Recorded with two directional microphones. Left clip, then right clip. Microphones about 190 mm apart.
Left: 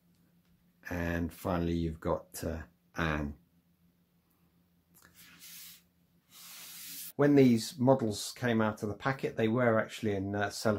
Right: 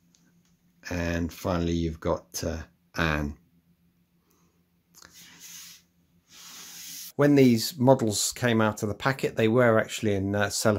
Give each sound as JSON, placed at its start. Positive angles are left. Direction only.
{"t": 0.7, "sound": "speech", "side_deg": -25}
{"t": 7.2, "sound": "speech", "side_deg": -35}